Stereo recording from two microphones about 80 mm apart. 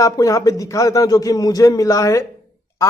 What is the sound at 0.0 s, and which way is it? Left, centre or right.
A man's voice, left.